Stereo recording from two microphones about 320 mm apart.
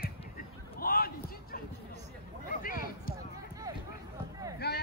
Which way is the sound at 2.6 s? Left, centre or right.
Left.